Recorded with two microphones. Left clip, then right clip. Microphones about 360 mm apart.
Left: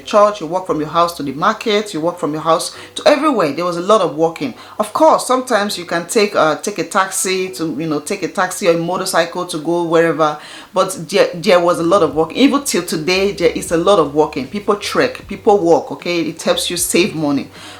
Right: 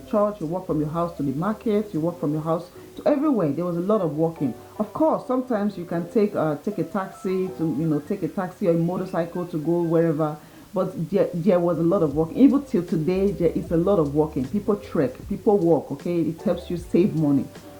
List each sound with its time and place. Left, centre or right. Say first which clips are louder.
0.1 s speech: left 11 dB; centre
5.3 s speech: left 10 dB; centre
9.6 s speech: left 6 dB; centre
9.9 s speech: left 12 dB; centre
15.4 s speech: left 8 dB; centre
16.5 s speech: left 9 dB; centre